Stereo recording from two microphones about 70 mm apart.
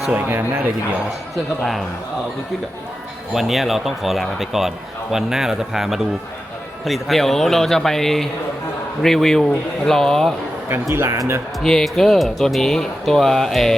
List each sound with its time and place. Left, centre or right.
0.1 s speech: right
3.3 s speech: centre
10.7 s speech: right
11.6 s speech: centre